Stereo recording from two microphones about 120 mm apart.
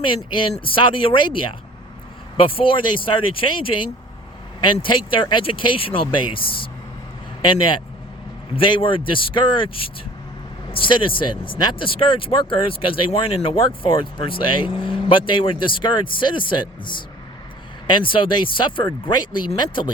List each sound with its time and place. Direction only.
0.2 s speech: 40° left (ahead or behind)
2.6 s speech: 45° left (ahead or behind)
8.5 s speech: 45° left (ahead or behind)